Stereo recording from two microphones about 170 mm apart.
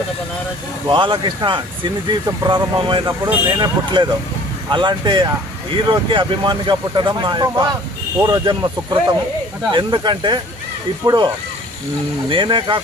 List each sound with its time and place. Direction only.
0.8 s speech: 25° right (ahead or behind)
12.3 s speech: 30° right (ahead or behind)